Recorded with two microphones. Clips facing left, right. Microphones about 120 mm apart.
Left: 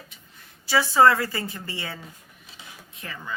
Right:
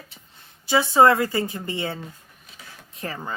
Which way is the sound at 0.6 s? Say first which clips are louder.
Right 2 dB; 20° right (ahead or behind).